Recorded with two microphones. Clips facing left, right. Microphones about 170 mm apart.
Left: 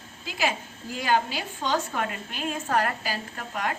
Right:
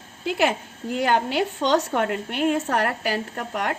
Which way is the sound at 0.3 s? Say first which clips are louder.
Right 6 dB; 60° right (ahead or behind).